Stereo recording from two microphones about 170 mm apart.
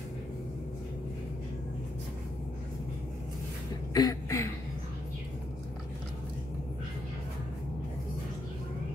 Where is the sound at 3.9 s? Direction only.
20° left (ahead or behind).